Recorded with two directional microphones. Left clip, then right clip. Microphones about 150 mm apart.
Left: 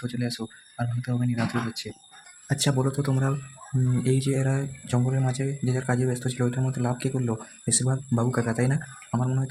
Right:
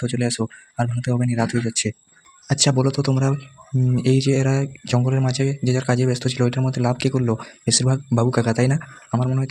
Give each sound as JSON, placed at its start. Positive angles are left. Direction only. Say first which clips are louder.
{"t": 0.0, "sound": "speech", "louder": "right 8 dB", "side_deg": -40}
{"t": 2.5, "sound": "speech", "louder": "right 7 dB", "side_deg": -35}